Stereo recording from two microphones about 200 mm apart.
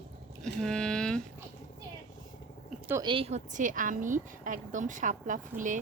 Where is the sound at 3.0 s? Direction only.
30° right (ahead or behind).